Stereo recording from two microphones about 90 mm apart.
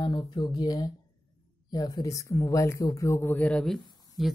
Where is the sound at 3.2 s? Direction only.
20° left (ahead or behind).